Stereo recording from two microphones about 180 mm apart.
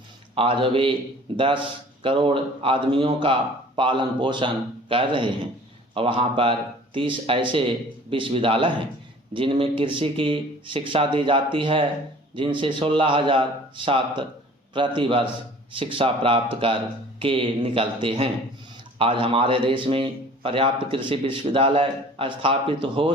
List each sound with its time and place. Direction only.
0.3 s a man's voice: 30° right (ahead or behind)